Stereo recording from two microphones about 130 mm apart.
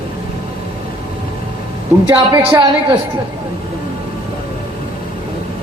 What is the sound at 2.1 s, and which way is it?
Speech, 35° right (ahead or behind).